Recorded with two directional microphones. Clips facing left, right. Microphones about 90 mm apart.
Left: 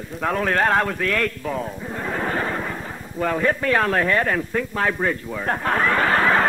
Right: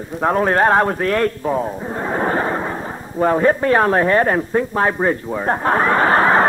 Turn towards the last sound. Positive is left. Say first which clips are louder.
# right 5 dB
turn(degrees=-30)  # may be behind; listen again after turning